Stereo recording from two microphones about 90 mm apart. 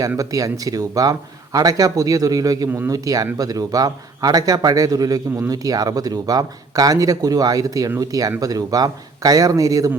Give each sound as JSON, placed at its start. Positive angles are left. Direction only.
{"t": 0.2, "sound": "a man's voice", "side_deg": -40}